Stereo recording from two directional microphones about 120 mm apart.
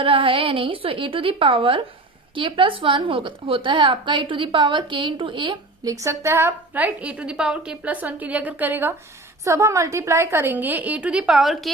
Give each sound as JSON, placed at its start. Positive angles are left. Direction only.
{"t": 0.0, "sound": "a woman's voice", "side_deg": -45}
{"t": 5.8, "sound": "a woman's voice", "side_deg": -30}